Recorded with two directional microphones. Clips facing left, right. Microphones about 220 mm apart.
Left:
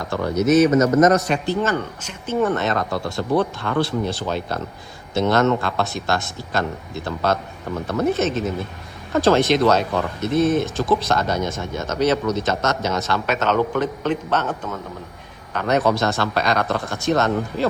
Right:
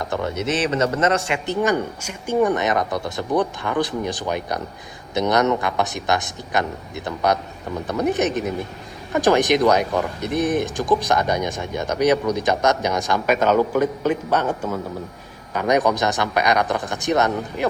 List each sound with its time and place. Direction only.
0.8 s a man's voice: 30° right (ahead or behind)
1.6 s speech: 10° right (ahead or behind)